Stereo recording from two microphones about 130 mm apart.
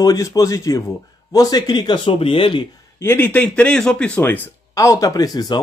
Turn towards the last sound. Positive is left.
turn(degrees=30)  # may be behind; listen again after turning